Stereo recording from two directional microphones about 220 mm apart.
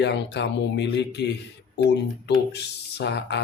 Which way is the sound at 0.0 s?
50° left (ahead or behind).